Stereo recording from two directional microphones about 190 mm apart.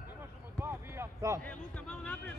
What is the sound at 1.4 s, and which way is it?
Speech, 5° left (ahead or behind).